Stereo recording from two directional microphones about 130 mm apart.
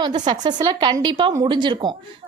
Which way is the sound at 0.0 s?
35° right (ahead or behind).